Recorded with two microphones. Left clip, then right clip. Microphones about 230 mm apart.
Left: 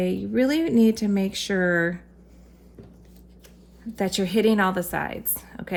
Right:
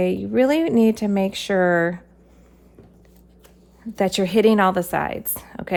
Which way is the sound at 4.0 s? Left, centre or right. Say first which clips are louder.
Right 5 dB; right.